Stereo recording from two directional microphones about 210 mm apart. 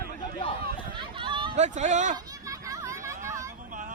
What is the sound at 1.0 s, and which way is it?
Speech, 25° right (ahead or behind).